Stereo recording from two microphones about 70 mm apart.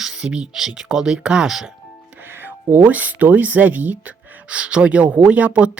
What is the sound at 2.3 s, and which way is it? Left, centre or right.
Speech, right.